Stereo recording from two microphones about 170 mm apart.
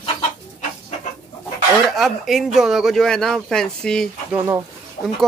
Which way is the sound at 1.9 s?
Centre (ahead or behind).